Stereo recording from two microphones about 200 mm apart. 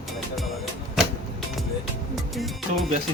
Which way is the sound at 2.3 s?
Centre (ahead or behind).